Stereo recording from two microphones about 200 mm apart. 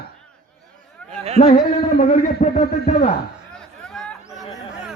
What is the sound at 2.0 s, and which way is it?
Speech, 35° left (ahead or behind).